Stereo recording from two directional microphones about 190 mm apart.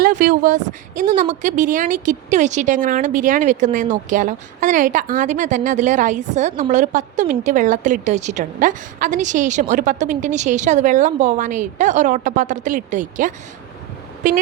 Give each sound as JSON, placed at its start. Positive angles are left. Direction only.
{"t": 0.0, "sound": "a woman's voice", "side_deg": -45}